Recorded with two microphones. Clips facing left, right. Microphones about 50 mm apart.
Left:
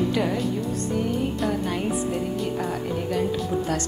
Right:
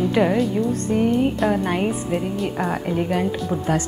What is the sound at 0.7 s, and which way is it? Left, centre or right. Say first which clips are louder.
A woman's voice: right 6 dB; right.